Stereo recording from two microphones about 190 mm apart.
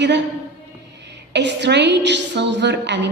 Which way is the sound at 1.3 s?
65° right (ahead or behind).